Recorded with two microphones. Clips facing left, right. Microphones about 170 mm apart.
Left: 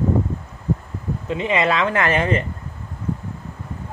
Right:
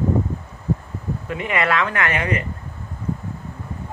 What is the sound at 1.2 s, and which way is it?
Speech, 20° left (ahead or behind).